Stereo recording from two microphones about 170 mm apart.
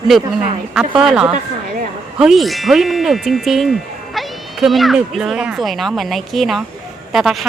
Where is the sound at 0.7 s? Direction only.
5° right (ahead or behind).